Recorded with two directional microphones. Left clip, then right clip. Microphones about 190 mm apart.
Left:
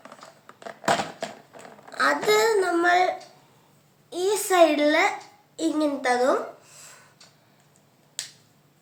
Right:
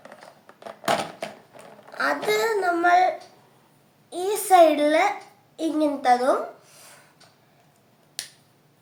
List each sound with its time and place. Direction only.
0.6 s a sound: centre (ahead or behind)
2.0 s a child's voice: 20° left (ahead or behind)
4.1 s a child's voice: 5° left (ahead or behind)